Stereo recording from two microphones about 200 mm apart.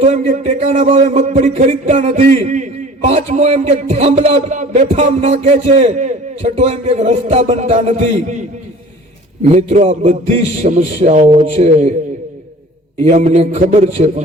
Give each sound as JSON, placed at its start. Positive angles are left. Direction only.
{"t": 0.0, "sound": "a man's voice", "side_deg": -35}
{"t": 9.6, "sound": "a man's voice", "side_deg": -35}
{"t": 13.0, "sound": "a man's voice", "side_deg": -35}